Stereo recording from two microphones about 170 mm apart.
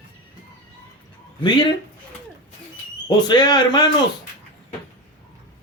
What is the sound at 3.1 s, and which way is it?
Speech, 25° left (ahead or behind).